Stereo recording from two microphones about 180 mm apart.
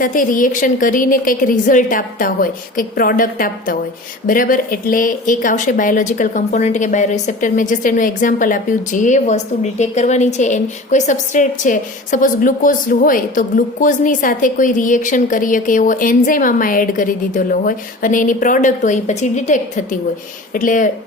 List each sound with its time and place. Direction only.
0.0 s speech: 50° left (ahead or behind)